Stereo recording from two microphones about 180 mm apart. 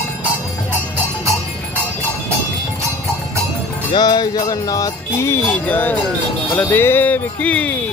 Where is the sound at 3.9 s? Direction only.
20° left (ahead or behind).